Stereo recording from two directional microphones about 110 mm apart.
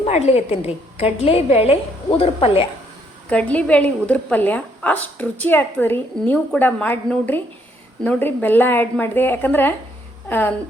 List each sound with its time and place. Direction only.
0.0 s a woman's voice: 70° left (ahead or behind)
3.2 s a woman's voice: 10° left (ahead or behind)